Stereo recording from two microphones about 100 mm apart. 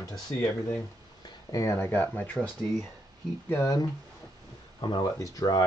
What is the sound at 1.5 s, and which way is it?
Speech, 30° left (ahead or behind).